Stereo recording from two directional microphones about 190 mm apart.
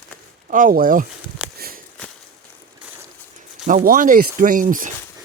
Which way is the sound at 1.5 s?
50° right (ahead or behind).